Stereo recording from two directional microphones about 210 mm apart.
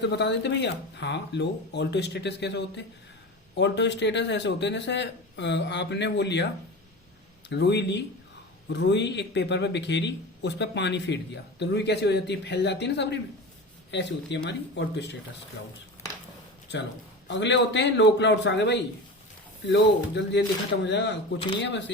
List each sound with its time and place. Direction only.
0.0 s a man's voice: 55° left (ahead or behind)
7.5 s a man's voice: 55° left (ahead or behind)
17.2 s a man's voice: 60° left (ahead or behind)